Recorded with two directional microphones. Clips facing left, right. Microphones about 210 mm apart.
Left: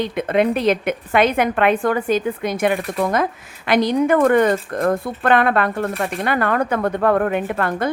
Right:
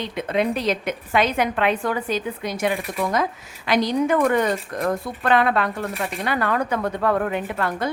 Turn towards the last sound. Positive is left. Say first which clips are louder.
# left 4 dB
turn(degrees=55)  # may be behind; listen again after turning